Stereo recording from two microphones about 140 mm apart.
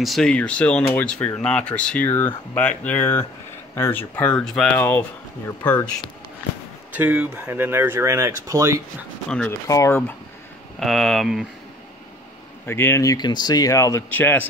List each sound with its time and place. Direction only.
0.0 s speech: centre (ahead or behind)
7.0 s speech: 10° right (ahead or behind)
9.5 s speech: 20° left (ahead or behind)
10.8 s speech: centre (ahead or behind)
12.6 s speech: 15° left (ahead or behind)